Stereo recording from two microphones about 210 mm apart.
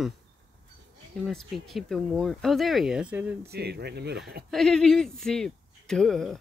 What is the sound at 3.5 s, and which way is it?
Speech, 50° right (ahead or behind).